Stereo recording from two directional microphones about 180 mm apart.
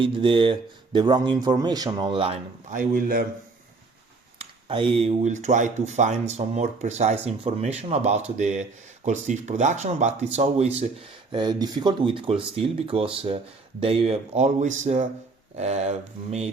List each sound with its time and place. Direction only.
0.0 s speech: 30° right (ahead or behind)
2.7 s speech: 50° right (ahead or behind)
4.4 s speech: 30° right (ahead or behind)
11.3 s speech: 25° right (ahead or behind)